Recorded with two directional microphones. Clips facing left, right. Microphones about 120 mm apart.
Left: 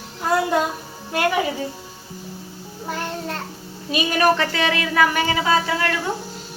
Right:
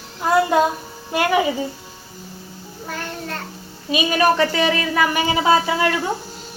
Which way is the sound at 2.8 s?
25° left (ahead or behind).